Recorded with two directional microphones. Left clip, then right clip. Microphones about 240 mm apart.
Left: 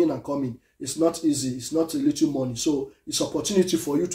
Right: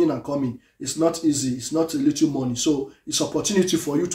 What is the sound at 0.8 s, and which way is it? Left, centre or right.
Speech, centre.